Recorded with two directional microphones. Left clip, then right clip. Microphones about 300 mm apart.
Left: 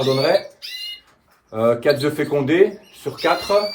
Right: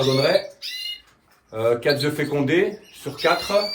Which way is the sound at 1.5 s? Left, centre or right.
Left.